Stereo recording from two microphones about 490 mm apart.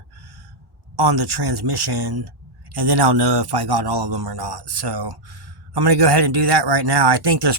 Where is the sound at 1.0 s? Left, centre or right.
Right.